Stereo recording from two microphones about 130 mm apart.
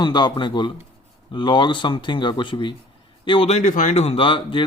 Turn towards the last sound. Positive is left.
turn(degrees=40)  # may be behind; listen again after turning